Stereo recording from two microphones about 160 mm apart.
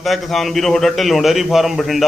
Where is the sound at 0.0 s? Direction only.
Centre (ahead or behind).